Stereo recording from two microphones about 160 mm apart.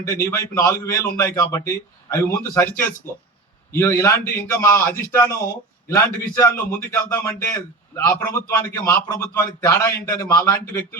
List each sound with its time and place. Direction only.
0.0 s a man's voice: 15° left (ahead or behind)